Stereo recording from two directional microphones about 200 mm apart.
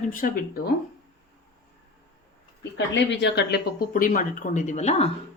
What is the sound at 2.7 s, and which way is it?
Speech, 60° left (ahead or behind).